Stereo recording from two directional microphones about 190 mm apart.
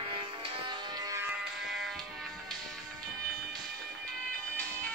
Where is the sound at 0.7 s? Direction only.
20° right (ahead or behind).